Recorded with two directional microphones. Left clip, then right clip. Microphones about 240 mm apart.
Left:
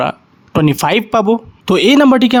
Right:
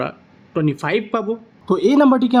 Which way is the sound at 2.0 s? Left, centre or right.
Left.